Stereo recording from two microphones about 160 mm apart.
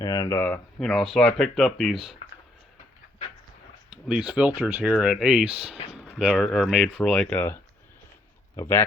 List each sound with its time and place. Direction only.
0.0 s speech: 20° left (ahead or behind); by 2.0 s centre (ahead or behind)
4.1 s speech: 5° right (ahead or behind)
7.3 s speech: 10° left (ahead or behind)